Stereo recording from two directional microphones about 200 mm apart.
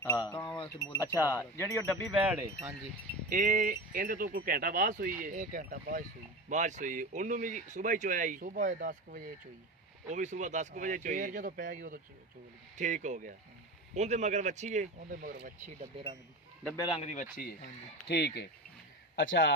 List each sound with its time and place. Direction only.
0.2 s wind chime: 25° left (ahead or behind)
1.3 s speech: 15° left (ahead or behind)
2.1 s wind chime: 5° right (ahead or behind)
3.2 s speech: 40° right (ahead or behind)
16.8 s speech: 30° left (ahead or behind); by 18.5 s 60° left (ahead or behind)
19.1 s a man's voice: 70° left (ahead or behind)